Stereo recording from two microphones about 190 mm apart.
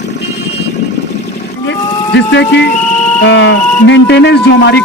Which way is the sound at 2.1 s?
70° left (ahead or behind).